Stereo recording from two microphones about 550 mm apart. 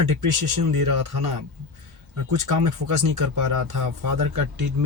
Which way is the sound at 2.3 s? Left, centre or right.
Right.